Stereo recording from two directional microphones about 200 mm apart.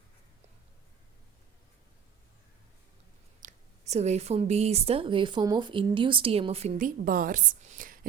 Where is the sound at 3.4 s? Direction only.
35° right (ahead or behind).